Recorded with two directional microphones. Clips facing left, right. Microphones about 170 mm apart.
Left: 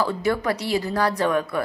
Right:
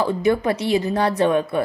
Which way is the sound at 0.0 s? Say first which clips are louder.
Right 4 dB; 20° right (ahead or behind).